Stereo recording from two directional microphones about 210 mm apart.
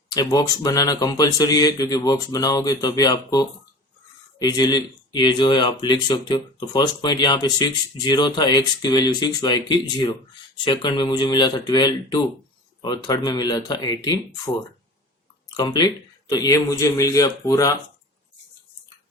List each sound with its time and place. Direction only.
0.1 s speech: 15° left (ahead or behind)